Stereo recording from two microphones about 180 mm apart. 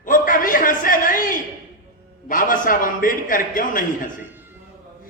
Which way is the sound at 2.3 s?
50° left (ahead or behind).